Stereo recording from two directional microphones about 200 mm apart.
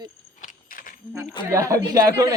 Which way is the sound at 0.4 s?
45° left (ahead or behind).